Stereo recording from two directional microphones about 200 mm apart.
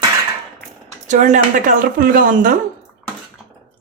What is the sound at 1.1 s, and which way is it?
Speech, 40° right (ahead or behind).